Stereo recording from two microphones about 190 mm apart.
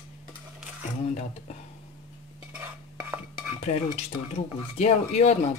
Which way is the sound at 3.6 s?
35° left (ahead or behind).